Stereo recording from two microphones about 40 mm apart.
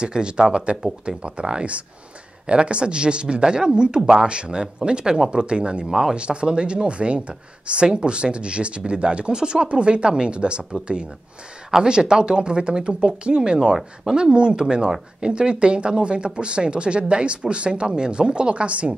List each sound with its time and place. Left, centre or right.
0.0 s speech: right
5.9 s speech: centre
6.1 s speech: right